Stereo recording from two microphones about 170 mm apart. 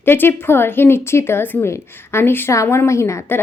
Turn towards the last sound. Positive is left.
turn(degrees=15)  # may be behind; listen again after turning